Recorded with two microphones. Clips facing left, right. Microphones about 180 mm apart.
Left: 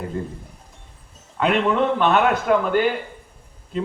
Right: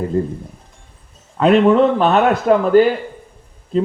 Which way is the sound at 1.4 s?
35° right (ahead or behind).